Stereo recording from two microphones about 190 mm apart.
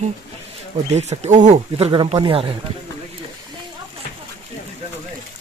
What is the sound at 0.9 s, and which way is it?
Speech, 35° right (ahead or behind).